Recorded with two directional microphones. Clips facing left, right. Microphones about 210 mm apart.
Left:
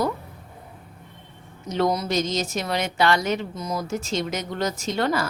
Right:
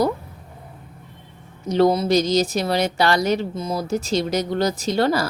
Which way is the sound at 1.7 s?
30° right (ahead or behind).